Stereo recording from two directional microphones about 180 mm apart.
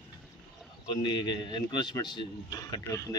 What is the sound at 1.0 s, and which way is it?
A man's voice, 25° left (ahead or behind).